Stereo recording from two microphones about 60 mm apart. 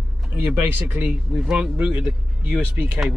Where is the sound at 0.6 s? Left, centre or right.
Right.